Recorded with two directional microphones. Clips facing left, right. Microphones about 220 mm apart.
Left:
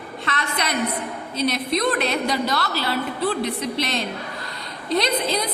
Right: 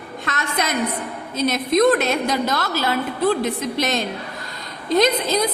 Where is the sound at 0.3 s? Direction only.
45° right (ahead or behind).